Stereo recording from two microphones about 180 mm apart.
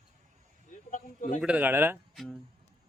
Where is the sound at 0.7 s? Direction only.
45° left (ahead or behind).